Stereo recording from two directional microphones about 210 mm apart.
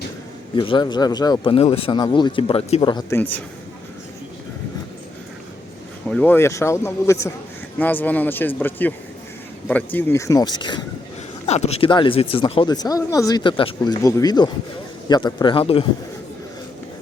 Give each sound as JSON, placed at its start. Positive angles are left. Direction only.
{"t": 0.5, "sound": "speech", "side_deg": 25}
{"t": 3.2, "sound": "a man's voice", "side_deg": 10}
{"t": 6.1, "sound": "a man's voice", "side_deg": 5}
{"t": 11.4, "sound": "speech", "side_deg": 30}